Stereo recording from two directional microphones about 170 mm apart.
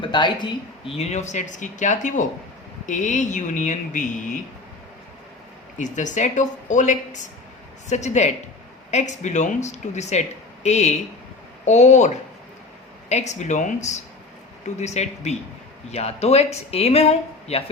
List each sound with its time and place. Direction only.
0.0 s speech: 25° left (ahead or behind); by 4.4 s 50° left (ahead or behind)
5.7 s speech: 45° left (ahead or behind)